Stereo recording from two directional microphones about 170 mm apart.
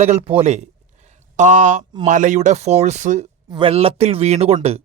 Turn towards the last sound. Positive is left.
turn(degrees=-40)  # may be behind; listen again after turning